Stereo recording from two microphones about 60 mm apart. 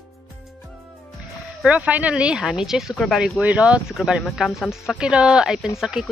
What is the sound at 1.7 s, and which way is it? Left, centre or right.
Speech, right.